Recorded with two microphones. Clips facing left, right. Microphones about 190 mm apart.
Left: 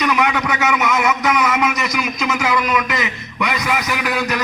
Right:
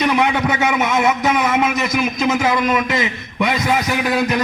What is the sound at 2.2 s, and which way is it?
A man's voice, 25° right (ahead or behind).